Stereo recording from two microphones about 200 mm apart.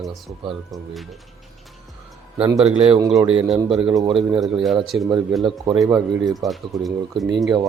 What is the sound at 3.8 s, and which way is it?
Speech, 25° right (ahead or behind).